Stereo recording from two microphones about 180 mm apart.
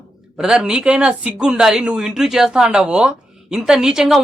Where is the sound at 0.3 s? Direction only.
5° right (ahead or behind).